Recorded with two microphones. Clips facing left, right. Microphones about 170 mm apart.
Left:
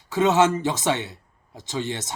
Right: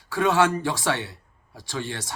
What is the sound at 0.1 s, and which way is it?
Speech, 20° left (ahead or behind).